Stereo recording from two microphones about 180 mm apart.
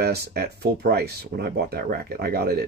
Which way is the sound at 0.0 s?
65° right (ahead or behind).